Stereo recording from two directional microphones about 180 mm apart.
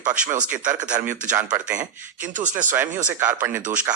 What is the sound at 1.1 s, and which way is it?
Speech, 45° right (ahead or behind).